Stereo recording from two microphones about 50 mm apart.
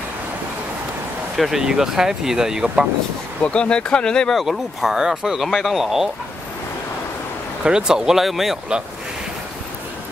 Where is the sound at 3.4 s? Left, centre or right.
Left.